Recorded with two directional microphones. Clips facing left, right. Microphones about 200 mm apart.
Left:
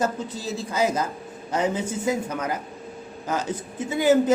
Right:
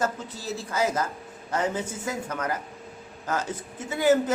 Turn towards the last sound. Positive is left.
turn(degrees=15)  # may be behind; listen again after turning